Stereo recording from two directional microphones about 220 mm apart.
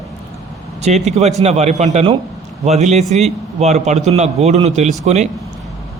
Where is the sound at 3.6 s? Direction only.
30° right (ahead or behind).